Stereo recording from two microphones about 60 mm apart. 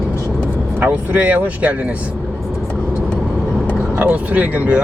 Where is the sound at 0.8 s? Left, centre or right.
Right.